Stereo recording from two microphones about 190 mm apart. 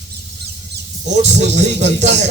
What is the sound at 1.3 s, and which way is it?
Speech, 35° right (ahead or behind).